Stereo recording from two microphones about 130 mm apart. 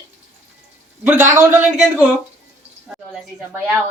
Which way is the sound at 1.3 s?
20° right (ahead or behind).